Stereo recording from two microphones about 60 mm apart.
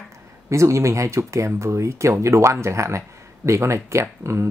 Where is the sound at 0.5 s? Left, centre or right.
Right.